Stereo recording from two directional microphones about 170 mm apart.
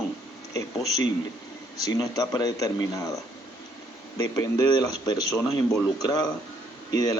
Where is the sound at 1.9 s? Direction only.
20° left (ahead or behind).